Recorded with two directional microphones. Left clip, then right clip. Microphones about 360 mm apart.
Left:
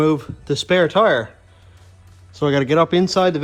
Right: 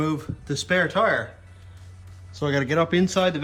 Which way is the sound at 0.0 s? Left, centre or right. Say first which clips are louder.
Left 9 dB; centre.